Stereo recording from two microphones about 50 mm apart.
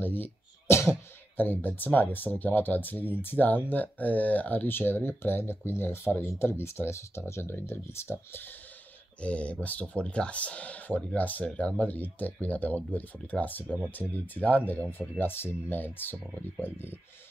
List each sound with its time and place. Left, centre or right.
0.0 s speech: left
1.3 s speech: left
9.2 s speech: left
11.4 s speech: left
11.8 s speech: left
14.9 s speech: left